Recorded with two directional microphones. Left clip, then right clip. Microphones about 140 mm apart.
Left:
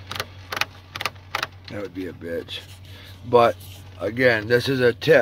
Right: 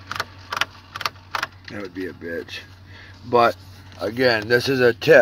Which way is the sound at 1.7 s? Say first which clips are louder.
Right 1 dB; 20° left (ahead or behind).